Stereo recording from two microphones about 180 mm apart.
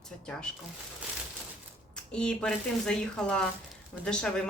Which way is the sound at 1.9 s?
5° left (ahead or behind).